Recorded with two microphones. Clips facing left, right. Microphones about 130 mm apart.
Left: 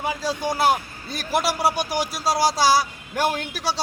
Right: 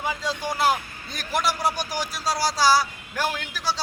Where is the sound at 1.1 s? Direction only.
5° left (ahead or behind).